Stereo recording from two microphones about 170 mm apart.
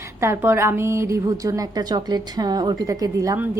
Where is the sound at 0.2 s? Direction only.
15° right (ahead or behind).